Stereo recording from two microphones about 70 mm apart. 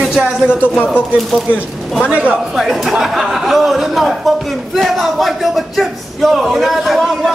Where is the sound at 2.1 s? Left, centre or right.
Centre.